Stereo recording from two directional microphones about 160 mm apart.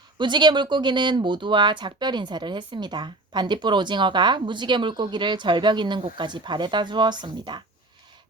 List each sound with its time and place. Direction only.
0.2 s speech: 30° right (ahead or behind)